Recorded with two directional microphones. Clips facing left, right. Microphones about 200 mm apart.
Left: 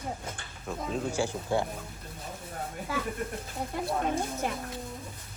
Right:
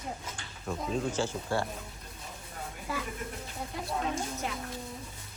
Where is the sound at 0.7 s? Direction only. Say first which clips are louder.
Even; centre (ahead or behind).